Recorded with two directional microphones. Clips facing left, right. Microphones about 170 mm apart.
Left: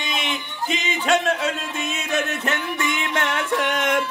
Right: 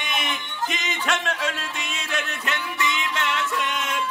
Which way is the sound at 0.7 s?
35° left (ahead or behind).